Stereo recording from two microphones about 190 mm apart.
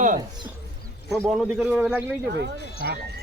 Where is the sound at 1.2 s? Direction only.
10° right (ahead or behind).